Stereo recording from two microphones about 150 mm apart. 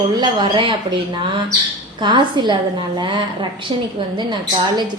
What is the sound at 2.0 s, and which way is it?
Speech, 30° right (ahead or behind).